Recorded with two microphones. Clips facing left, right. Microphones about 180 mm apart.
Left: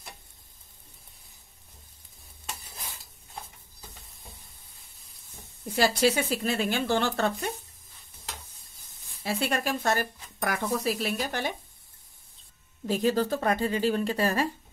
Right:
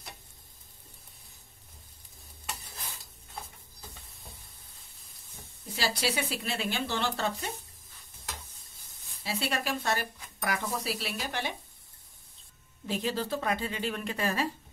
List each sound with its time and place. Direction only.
5.8 s speech: 45° left (ahead or behind)
9.2 s speech: 50° left (ahead or behind)
12.8 s speech: 45° left (ahead or behind)